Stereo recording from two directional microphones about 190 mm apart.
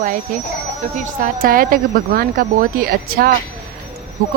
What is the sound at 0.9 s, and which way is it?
A woman's voice, 50° right (ahead or behind).